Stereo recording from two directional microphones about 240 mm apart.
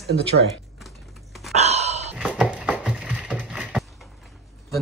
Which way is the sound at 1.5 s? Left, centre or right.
Right.